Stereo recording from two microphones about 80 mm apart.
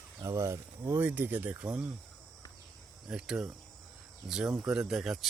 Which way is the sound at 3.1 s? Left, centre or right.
Centre.